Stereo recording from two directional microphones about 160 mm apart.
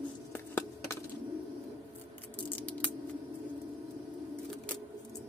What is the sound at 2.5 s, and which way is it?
Scissors, 10° left (ahead or behind).